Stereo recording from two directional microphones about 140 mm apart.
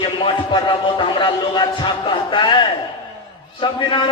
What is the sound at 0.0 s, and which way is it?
A man's voice, 35° left (ahead or behind).